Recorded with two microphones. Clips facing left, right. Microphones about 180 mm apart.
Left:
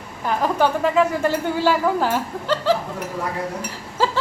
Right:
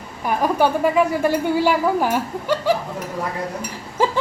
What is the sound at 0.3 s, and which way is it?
Speech, 10° right (ahead or behind).